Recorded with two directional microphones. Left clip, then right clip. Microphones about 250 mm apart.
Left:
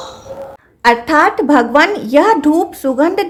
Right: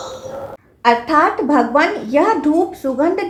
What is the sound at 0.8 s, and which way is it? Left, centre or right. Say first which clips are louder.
A woman's voice: left 3 dB; left.